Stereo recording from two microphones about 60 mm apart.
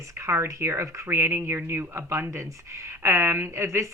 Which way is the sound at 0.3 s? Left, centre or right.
Right.